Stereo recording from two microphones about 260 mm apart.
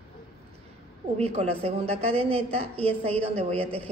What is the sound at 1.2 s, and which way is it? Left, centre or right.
A woman's voice, right.